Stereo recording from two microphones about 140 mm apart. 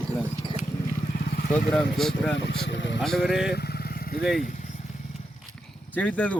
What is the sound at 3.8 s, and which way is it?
Vehicle, 90° left.